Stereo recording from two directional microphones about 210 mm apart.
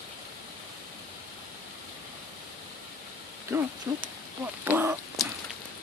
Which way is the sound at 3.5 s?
10° right (ahead or behind).